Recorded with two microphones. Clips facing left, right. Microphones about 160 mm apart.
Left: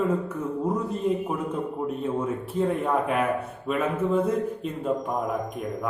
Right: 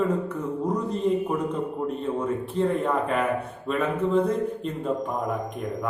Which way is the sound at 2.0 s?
5° left (ahead or behind).